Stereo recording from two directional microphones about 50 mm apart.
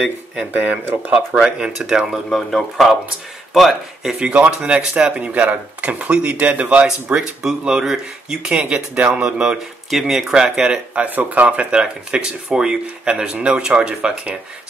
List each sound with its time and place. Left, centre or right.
0.5 s speech: right
1.1 s speech: centre
2.3 s speech: centre
4.5 s speech: right
7.2 s speech: centre
8.3 s speech: centre
9.8 s speech: centre
10.3 s speech: centre
11.1 s speech: right; by 14.3 s centre